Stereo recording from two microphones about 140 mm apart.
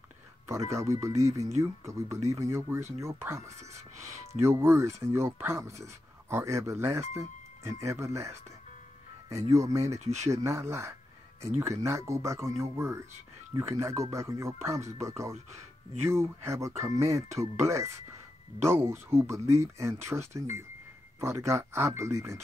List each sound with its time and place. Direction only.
0.5 s speech: 20° right (ahead or behind)
9.5 s speech: 20° right (ahead or behind)
9.9 s speech: 55° right (ahead or behind)
10.3 s speech: 20° right (ahead or behind)
15.3 s speech: 50° right (ahead or behind)
16.1 s speech: 20° right (ahead or behind)